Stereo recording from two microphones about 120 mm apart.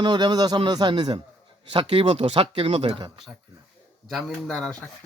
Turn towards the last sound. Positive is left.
turn(degrees=10)  # may be behind; listen again after turning